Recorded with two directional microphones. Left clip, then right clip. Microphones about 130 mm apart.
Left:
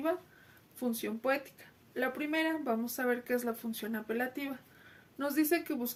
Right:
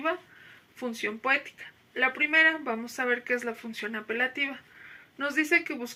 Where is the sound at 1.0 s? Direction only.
40° left (ahead or behind).